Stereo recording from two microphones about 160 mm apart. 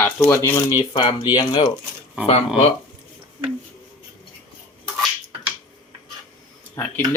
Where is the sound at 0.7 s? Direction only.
30° left (ahead or behind).